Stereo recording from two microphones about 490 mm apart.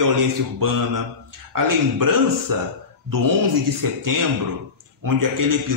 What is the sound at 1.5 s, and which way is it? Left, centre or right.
Speech, right.